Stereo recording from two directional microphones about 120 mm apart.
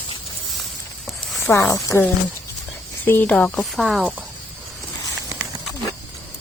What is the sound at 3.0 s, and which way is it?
Speech, 15° left (ahead or behind).